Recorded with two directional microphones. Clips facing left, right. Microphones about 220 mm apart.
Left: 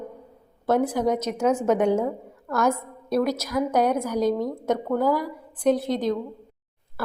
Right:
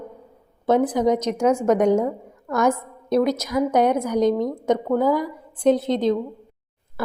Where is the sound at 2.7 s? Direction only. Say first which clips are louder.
Right 4 dB; 20° right (ahead or behind).